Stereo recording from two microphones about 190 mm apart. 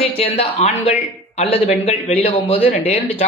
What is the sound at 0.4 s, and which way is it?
Speech, 30° left (ahead or behind).